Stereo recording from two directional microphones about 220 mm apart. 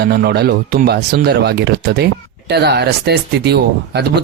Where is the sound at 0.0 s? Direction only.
45° right (ahead or behind).